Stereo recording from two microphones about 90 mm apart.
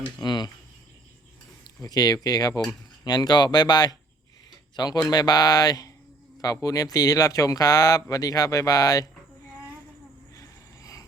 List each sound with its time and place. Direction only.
0.2 s speech: 55° left (ahead or behind)
1.8 s speech: 45° left (ahead or behind)
10.3 s a sound: 40° left (ahead or behind)